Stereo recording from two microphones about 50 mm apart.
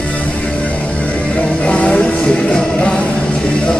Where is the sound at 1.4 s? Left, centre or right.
Left.